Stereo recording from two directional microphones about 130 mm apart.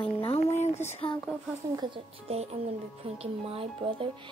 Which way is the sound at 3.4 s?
45° right (ahead or behind).